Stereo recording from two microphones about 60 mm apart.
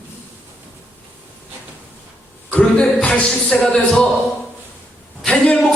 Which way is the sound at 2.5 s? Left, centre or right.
Left.